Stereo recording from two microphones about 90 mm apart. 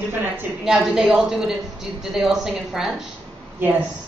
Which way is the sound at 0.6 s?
5° right (ahead or behind).